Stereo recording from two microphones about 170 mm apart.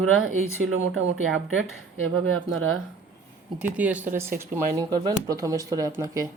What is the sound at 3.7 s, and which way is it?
Speech, 10° right (ahead or behind).